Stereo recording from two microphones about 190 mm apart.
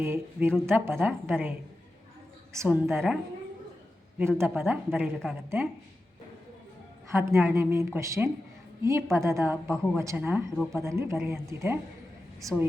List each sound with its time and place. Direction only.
0.0 s a woman's voice: 10° right (ahead or behind)
4.4 s a woman's voice: 10° right (ahead or behind)
7.1 s a woman's voice: 15° right (ahead or behind)